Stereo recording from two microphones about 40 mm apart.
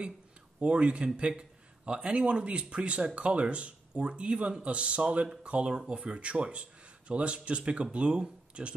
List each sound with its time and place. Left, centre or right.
0.6 s speech: right